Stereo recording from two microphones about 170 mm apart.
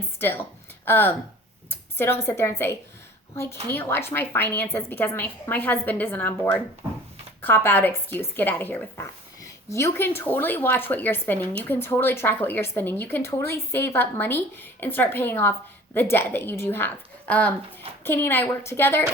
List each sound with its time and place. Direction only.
0.2 s a woman's voice: 10° left (ahead or behind)